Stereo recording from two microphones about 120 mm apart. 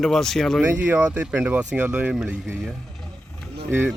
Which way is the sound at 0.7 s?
15° right (ahead or behind).